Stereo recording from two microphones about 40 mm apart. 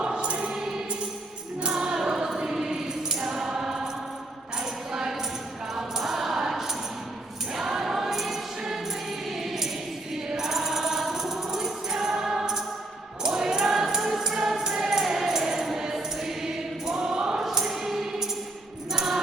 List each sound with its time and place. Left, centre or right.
0.0 s music: right
1.6 s music: right
4.9 s tambourine: centre
7.5 s choir: centre
9.3 s music: centre